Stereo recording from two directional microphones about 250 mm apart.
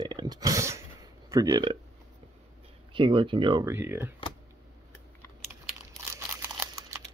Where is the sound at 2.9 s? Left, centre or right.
Centre.